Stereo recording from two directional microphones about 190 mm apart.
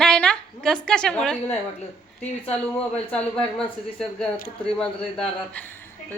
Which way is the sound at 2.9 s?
5° left (ahead or behind).